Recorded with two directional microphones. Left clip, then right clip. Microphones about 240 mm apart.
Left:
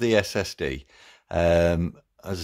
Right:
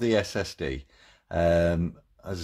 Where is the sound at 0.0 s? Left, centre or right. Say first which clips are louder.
Left 3 dB; left.